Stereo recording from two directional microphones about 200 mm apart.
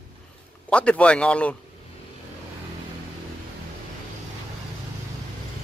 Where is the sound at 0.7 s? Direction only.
5° left (ahead or behind).